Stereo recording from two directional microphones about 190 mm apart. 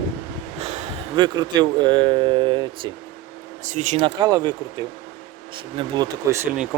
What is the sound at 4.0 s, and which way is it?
Speech, 20° right (ahead or behind).